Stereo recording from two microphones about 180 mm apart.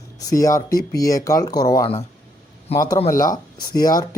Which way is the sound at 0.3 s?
20° left (ahead or behind).